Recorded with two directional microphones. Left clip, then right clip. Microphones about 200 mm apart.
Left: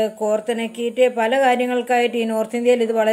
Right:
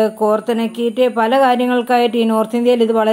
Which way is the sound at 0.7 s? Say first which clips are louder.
Right 4 dB; 10° right (ahead or behind).